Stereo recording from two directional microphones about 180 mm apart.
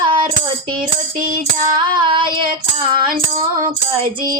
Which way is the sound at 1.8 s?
25° right (ahead or behind).